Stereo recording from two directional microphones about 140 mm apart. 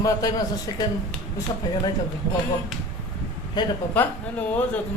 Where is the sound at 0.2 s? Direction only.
25° left (ahead or behind).